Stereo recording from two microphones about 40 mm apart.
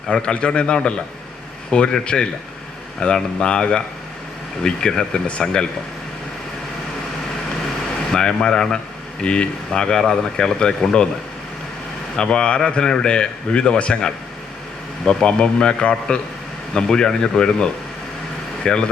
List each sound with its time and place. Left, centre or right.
0.1 s speech: left
8.1 s speech: centre
12.1 s speech: left